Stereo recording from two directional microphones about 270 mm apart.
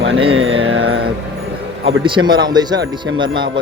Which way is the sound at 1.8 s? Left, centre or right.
Centre.